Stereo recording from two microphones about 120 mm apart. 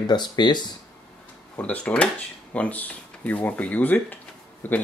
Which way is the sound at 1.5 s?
10° left (ahead or behind).